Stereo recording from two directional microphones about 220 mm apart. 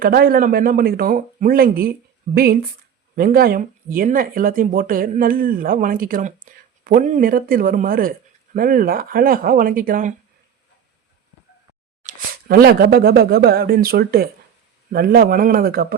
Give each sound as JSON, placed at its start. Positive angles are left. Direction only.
{"t": 0.0, "sound": "speech", "side_deg": -40}
{"t": 12.0, "sound": "speech", "side_deg": -40}